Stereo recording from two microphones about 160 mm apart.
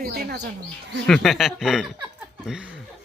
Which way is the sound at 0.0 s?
80° right.